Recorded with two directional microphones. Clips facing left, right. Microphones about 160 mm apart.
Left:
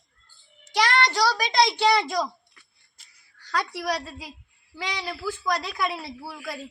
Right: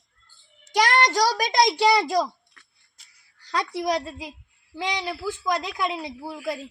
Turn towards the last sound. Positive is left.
turn(degrees=-15)  # may be behind; listen again after turning